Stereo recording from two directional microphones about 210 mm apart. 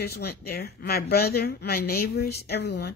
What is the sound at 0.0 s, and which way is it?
Speech, 50° left (ahead or behind).